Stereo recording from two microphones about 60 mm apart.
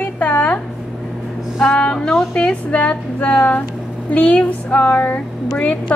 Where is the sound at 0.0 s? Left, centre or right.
Left.